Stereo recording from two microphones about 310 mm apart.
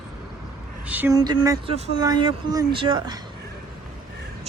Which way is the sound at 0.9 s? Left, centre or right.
Centre.